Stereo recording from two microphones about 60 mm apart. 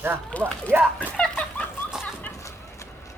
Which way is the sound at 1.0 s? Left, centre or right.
Left.